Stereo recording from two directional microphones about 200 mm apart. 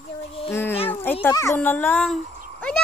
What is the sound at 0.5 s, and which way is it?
Speech, 10° left (ahead or behind).